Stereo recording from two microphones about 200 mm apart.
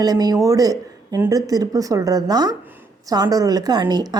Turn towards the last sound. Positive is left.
turn(degrees=-20)  # may be behind; listen again after turning